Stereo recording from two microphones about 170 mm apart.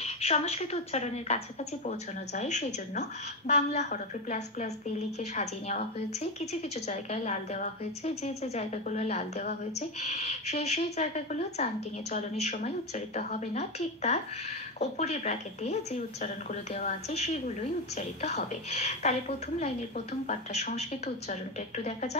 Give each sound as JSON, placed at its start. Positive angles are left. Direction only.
{"t": 0.0, "sound": "a woman's voice", "side_deg": 40}